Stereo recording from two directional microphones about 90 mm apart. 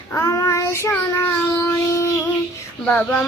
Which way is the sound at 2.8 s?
15° left (ahead or behind).